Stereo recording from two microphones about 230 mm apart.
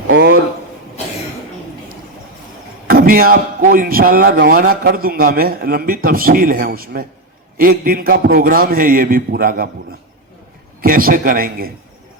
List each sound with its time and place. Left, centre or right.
0.1 s a sound: right
2.9 s a man's voice: right
10.8 s a man's voice: right